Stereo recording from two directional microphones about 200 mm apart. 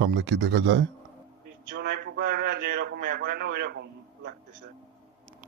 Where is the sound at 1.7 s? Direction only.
55° right (ahead or behind).